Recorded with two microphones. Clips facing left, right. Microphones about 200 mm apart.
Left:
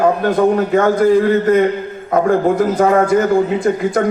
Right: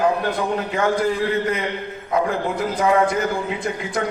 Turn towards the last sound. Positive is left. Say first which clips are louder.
# left 10 dB
turn(degrees=50)  # may be behind; listen again after turning